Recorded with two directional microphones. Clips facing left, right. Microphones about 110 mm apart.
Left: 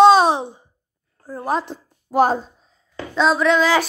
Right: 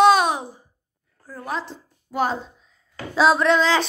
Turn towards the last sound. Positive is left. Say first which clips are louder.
# left 1 dB
turn(degrees=0)  # may be behind; listen again after turning